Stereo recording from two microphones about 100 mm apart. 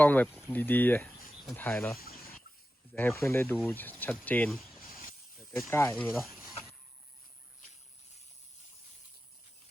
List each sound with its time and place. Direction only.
0.0 s speech: 15° left (ahead or behind)
1.0 s a sound: centre (ahead or behind)
1.5 s speech: 20° left (ahead or behind)
2.9 s speech: 20° left (ahead or behind)
4.5 s snake: centre (ahead or behind)
5.7 s speech: 20° left (ahead or behind)